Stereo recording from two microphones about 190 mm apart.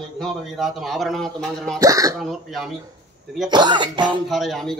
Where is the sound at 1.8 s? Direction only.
20° right (ahead or behind).